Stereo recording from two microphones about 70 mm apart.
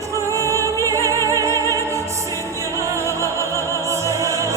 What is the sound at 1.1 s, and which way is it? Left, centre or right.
Music, right.